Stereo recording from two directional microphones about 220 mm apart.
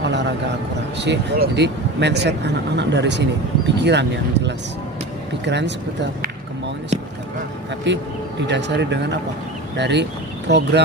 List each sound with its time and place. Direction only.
0.0 s a sound: 55° right (ahead or behind)
0.9 s speech: 50° right (ahead or behind)
7.9 s speech: 55° right (ahead or behind)